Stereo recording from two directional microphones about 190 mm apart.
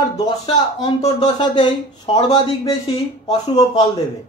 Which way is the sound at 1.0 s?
25° left (ahead or behind).